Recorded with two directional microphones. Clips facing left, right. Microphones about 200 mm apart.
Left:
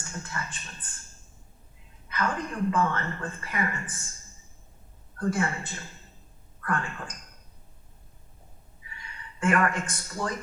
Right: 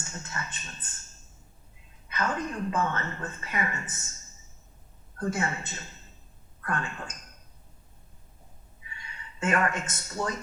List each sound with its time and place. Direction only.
0.0 s a woman's voice: 25° right (ahead or behind)
2.0 s a woman's voice: 20° right (ahead or behind)
5.1 s a woman's voice: 25° right (ahead or behind)
9.4 s a woman's voice: 25° right (ahead or behind)